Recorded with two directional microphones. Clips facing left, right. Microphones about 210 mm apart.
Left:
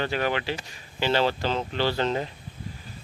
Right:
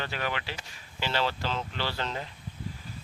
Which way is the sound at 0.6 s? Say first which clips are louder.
Left 6 dB; 25° left (ahead or behind).